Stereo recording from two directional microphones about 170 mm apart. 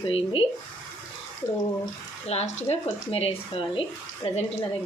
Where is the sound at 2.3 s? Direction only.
40° left (ahead or behind).